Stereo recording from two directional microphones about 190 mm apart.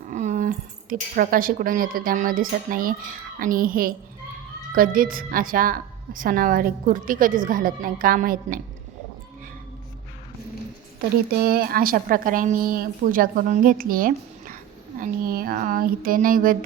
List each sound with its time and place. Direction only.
0.1 s a woman's voice: 40° right (ahead or behind)
11.4 s a woman's voice: 50° right (ahead or behind)